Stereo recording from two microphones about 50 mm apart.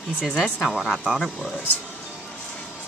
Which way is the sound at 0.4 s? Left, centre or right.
Centre.